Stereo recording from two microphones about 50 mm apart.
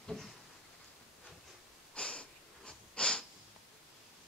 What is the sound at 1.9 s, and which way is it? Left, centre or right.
Wheeze, left.